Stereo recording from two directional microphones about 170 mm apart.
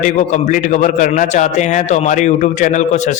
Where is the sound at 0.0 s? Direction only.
50° left (ahead or behind).